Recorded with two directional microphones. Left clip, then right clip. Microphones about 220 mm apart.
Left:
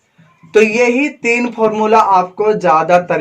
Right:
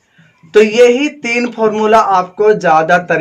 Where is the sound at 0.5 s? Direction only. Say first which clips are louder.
Right 3 dB; 25° right (ahead or behind).